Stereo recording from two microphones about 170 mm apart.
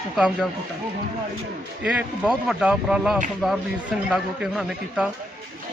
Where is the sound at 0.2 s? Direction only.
Centre (ahead or behind).